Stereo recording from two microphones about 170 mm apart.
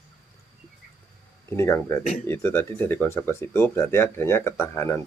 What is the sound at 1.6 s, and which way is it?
Speech, 15° left (ahead or behind).